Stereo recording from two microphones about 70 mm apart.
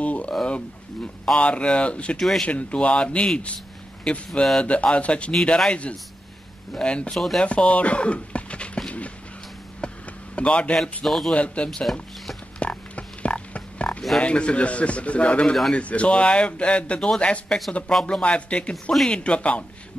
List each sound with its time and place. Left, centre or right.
0.0 s a sound: centre
0.3 s speech: centre
2.1 s speech: centre
2.4 s speech: centre
4.3 s speech: centre
4.6 s speech: centre
7.2 s speech: centre
7.4 s a sound: centre
10.3 s speech: centre
11.1 s speech: centre
11.3 s speech: centre
11.8 s speech: centre
12.5 s a sound: centre
14.2 s speech: centre